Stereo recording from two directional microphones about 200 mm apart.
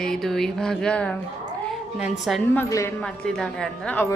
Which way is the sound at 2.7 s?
15° left (ahead or behind).